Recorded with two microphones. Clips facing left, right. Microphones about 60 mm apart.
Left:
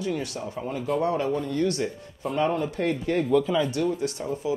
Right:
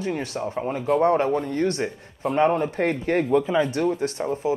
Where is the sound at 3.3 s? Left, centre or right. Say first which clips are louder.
Even; right.